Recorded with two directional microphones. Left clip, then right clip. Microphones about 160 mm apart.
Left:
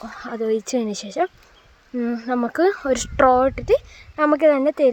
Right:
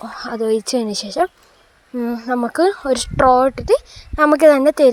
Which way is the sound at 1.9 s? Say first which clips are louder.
Right 3 dB; centre (ahead or behind).